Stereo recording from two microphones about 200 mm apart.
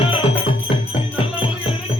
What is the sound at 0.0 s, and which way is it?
Music, 25° left (ahead or behind).